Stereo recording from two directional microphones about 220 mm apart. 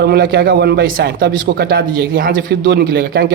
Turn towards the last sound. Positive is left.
turn(degrees=-45)  # may be behind; listen again after turning